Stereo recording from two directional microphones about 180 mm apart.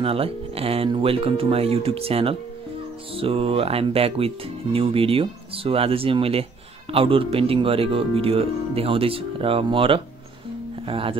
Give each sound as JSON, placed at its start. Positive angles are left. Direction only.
{"t": 0.0, "sound": "speech", "side_deg": -30}